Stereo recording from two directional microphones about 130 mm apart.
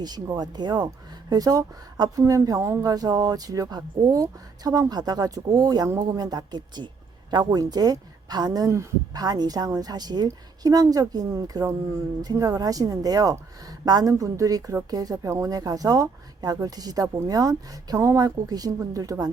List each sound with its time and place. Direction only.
0.0 s speech: 30° right (ahead or behind)